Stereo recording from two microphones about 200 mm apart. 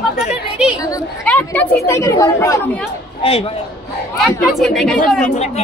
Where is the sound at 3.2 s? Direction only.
30° left (ahead or behind).